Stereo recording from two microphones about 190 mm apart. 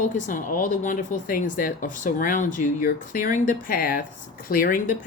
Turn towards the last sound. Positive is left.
turn(degrees=45)  # may be behind; listen again after turning